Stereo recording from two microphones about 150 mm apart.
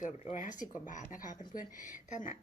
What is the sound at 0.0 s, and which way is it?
Speech, 55° left (ahead or behind).